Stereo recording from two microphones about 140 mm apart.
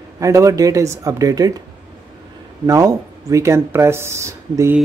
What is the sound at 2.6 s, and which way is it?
Speech, 25° right (ahead or behind).